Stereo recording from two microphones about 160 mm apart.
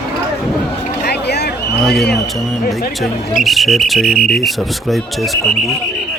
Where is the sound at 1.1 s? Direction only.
90° left.